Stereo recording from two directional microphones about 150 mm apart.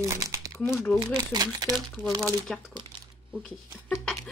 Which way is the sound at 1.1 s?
25° right (ahead or behind).